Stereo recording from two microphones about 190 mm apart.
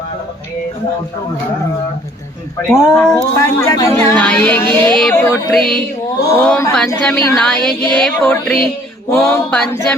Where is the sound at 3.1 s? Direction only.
15° left (ahead or behind).